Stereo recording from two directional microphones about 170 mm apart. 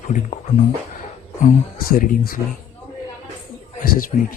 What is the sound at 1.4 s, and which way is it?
Speech, 50° left (ahead or behind).